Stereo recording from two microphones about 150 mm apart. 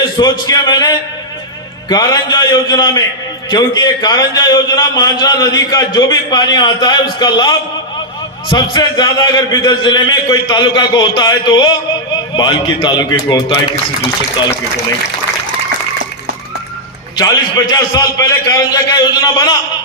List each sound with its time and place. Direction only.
0.2 s a man's voice: 25° left (ahead or behind)
17.2 s a man's voice: 25° left (ahead or behind)